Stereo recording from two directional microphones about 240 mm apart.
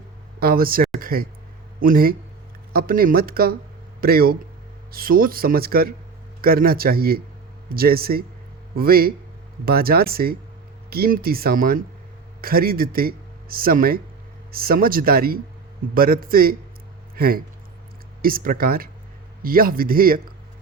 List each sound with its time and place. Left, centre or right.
0.3 s speech: right
0.9 s a sound: right
1.8 s speech: right